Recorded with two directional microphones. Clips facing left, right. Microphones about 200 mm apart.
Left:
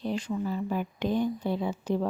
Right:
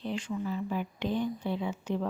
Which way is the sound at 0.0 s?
40° left (ahead or behind).